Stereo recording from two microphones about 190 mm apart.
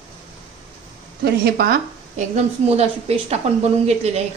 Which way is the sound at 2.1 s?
35° right (ahead or behind).